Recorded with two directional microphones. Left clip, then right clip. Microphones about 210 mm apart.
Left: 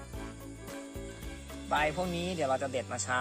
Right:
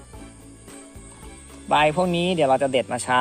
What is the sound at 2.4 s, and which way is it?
Speech, 20° right (ahead or behind).